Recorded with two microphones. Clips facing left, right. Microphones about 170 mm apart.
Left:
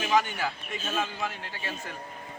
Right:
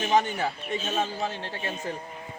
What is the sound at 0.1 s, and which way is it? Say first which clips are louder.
A man's voice: right 2 dB; 30° right (ahead or behind).